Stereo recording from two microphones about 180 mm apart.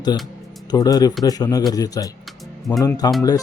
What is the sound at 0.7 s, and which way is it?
Speech, 20° left (ahead or behind).